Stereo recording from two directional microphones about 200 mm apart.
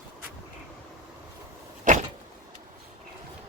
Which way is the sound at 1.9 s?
40° right (ahead or behind).